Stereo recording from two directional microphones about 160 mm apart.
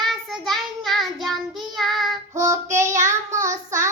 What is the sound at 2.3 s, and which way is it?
Child singing, 20° right (ahead or behind).